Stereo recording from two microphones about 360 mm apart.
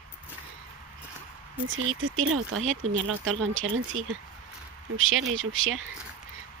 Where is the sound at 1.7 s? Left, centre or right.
Right.